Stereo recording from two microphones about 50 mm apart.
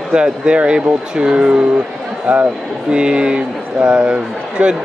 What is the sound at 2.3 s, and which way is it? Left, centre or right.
Speech, right.